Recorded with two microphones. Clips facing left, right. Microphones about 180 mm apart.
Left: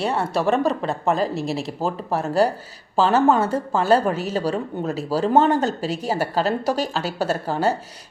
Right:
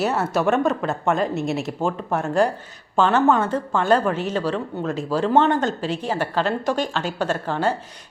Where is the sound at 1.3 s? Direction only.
35° left (ahead or behind).